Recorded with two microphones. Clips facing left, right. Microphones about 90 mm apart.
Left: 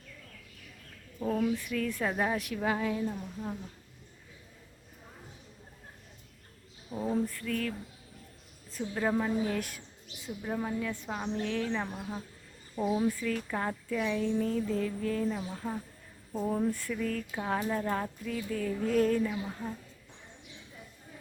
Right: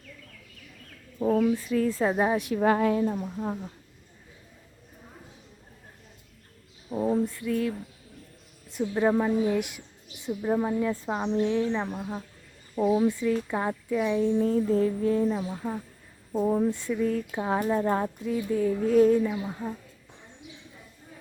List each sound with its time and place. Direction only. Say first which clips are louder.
1.2 s speech: right 6 dB; 25° right (ahead or behind)
2.6 s a woman's voice: right 10 dB; 50° right (ahead or behind)
6.9 s mantra: right 5 dB; 20° right (ahead or behind)
8.7 s speech: right 6 dB; 20° right (ahead or behind)
10.2 s speech: right 8 dB; 30° right (ahead or behind)
12.7 s speech: right 6 dB; 10° right (ahead or behind)
18.8 s speech: right 6 dB; 5° right (ahead or behind)